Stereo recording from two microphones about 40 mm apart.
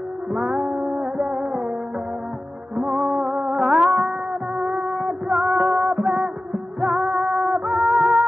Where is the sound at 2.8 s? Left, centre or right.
Centre.